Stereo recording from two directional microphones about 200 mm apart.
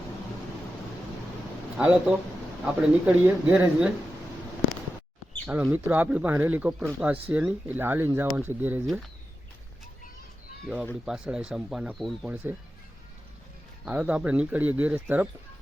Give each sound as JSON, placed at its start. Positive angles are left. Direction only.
{"t": 1.8, "sound": "speech", "side_deg": -5}
{"t": 5.5, "sound": "speech", "side_deg": -10}
{"t": 11.0, "sound": "speech", "side_deg": -5}
{"t": 13.8, "sound": "speech", "side_deg": -5}